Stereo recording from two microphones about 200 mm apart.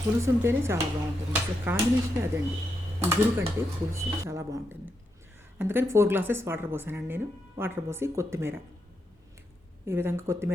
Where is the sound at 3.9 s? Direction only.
15° right (ahead or behind).